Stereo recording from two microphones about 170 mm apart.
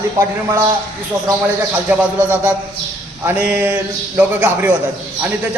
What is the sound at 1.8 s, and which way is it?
A man's voice, 10° right (ahead or behind).